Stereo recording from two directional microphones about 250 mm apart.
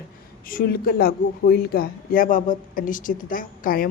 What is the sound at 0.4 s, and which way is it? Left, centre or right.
A woman's voice, left.